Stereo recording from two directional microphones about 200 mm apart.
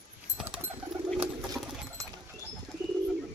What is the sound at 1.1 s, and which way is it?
Bird, centre (ahead or behind).